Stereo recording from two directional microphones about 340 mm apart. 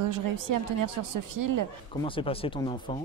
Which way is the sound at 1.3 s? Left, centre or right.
Right.